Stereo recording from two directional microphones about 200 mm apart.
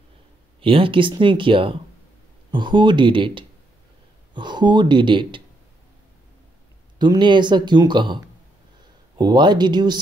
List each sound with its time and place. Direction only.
0.6 s speech: 25° right (ahead or behind)
7.0 s speech: 25° right (ahead or behind)
9.2 s speech: 20° right (ahead or behind)